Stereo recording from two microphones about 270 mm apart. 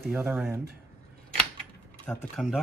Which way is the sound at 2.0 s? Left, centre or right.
Centre.